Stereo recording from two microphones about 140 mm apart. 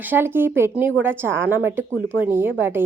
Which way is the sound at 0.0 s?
15° right (ahead or behind).